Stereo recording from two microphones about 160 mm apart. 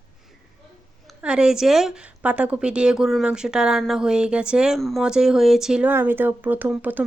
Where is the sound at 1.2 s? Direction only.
5° right (ahead or behind).